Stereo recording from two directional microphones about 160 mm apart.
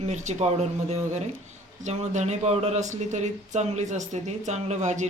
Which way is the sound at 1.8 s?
45° right (ahead or behind).